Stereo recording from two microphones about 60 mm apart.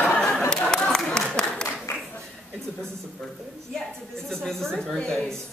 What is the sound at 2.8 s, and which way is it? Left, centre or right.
A woman's voice, centre.